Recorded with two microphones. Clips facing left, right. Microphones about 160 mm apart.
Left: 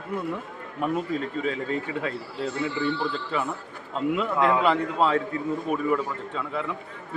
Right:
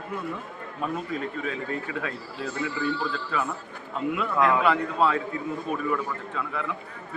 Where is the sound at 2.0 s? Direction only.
25° left (ahead or behind).